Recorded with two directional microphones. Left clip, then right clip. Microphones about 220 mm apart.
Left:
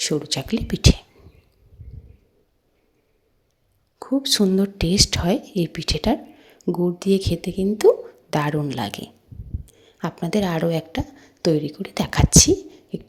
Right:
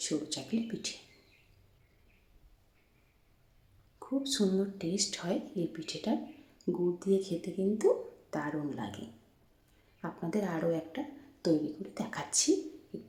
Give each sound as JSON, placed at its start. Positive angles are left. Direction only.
{"t": 0.0, "sound": "speech", "side_deg": 40}
{"t": 4.0, "sound": "speech", "side_deg": 40}